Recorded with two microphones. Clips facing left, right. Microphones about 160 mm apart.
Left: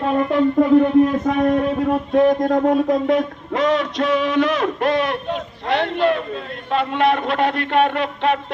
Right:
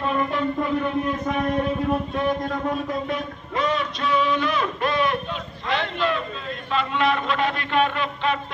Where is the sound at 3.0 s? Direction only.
85° left; by 8.4 s 70° left (ahead or behind).